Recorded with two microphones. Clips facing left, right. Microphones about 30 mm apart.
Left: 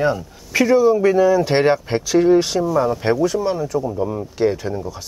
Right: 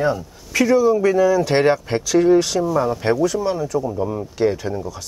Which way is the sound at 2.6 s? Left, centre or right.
Centre.